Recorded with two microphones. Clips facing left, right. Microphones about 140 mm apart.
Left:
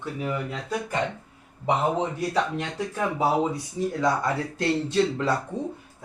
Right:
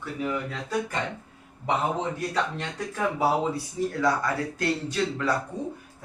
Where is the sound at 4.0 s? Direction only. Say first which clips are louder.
Left 1 dB; 25° left (ahead or behind).